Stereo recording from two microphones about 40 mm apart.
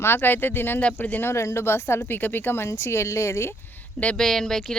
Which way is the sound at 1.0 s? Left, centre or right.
Left.